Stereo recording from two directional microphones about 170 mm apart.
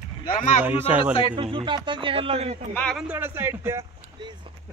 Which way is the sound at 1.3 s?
30° right (ahead or behind).